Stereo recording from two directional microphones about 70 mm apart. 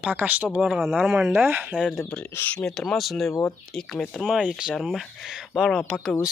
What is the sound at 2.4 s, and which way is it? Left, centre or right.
Speech, left.